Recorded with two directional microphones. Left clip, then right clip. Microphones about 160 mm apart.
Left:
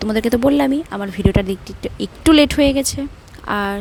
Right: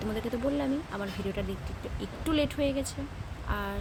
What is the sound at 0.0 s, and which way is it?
Speech, 65° left (ahead or behind).